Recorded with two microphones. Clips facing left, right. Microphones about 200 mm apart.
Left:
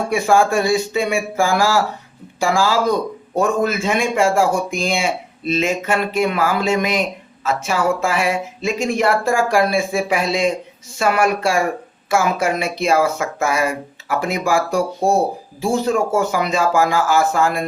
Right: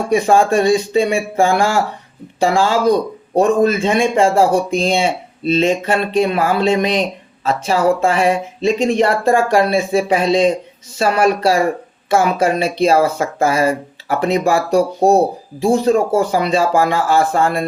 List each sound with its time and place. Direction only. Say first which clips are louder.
0.3 s speech: right 2 dB; 35° right (ahead or behind)